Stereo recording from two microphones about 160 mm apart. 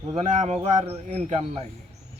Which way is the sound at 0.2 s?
45° right (ahead or behind).